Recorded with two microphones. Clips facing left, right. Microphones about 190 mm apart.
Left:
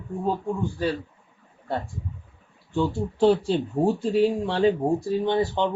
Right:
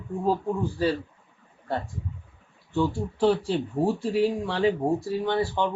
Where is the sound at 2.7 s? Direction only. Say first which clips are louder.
Left 1 dB; 25° left (ahead or behind).